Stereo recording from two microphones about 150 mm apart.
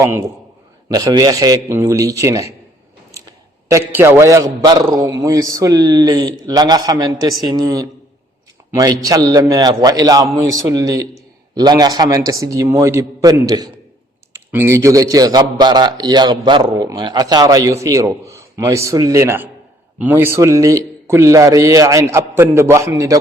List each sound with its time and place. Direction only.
0.0 s a man's voice: 15° right (ahead or behind)